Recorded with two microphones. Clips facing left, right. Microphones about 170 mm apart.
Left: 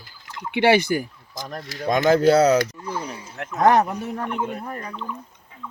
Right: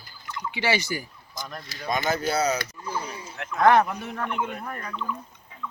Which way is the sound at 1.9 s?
90° left.